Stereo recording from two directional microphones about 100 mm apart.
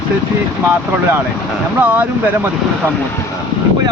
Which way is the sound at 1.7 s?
15° right (ahead or behind).